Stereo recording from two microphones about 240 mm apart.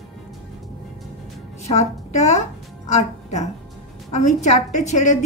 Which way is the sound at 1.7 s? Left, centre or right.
Left.